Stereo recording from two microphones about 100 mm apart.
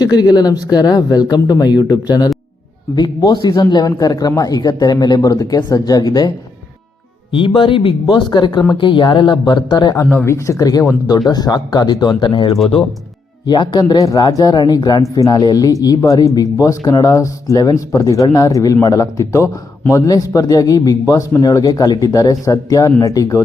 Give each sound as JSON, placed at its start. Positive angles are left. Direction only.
{"t": 0.0, "sound": "a man's voice", "side_deg": 40}
{"t": 7.3, "sound": "speech", "side_deg": 55}
{"t": 9.5, "sound": "speech", "side_deg": 45}
{"t": 10.1, "sound": "speech", "side_deg": 20}
{"t": 10.3, "sound": "a man's voice", "side_deg": 30}
{"t": 13.5, "sound": "a man's voice", "side_deg": 45}